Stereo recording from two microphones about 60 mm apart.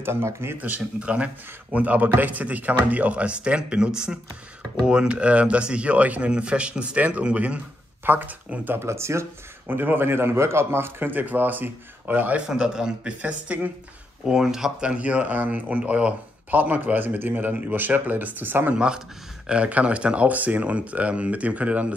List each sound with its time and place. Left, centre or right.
0.0 s speech: right
0.6 s speech: right
8.0 s speech: right
8.7 s speech: right
9.7 s speech: right
12.4 s a man's voice: centre
13.2 s speech: right
14.2 s speech: centre; by 18.8 s right
18.8 s speech: centre